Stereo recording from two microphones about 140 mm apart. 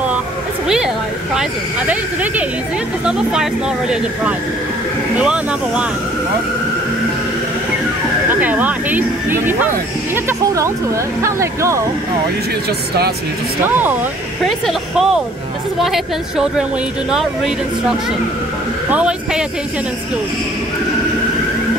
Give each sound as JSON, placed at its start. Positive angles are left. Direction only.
{"t": 0.7, "sound": "speech", "side_deg": -5}
{"t": 3.9, "sound": "speech", "side_deg": -10}
{"t": 8.3, "sound": "speech", "side_deg": -10}
{"t": 14.7, "sound": "speech", "side_deg": -5}